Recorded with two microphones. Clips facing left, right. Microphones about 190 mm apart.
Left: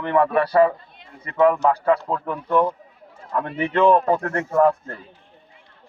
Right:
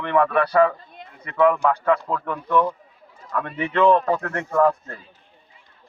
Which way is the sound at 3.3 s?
30° left (ahead or behind).